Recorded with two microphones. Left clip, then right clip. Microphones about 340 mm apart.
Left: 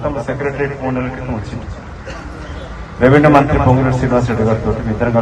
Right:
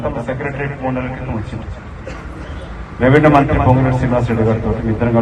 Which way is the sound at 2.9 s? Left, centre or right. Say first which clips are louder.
Left 1 dB; left.